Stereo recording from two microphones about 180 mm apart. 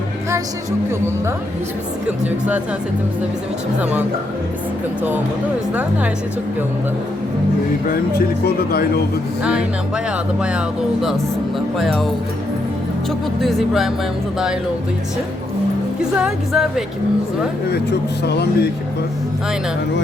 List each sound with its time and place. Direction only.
8.4 s speech: 60° left (ahead or behind)
9.4 s speech: 5° right (ahead or behind)
11.8 s speech: centre (ahead or behind)
13.4 s speech: centre (ahead or behind)
16.0 s speech: 5° right (ahead or behind)
18.3 s speech: 70° left (ahead or behind)